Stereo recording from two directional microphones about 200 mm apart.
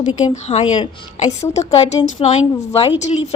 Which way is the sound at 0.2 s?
35° left (ahead or behind).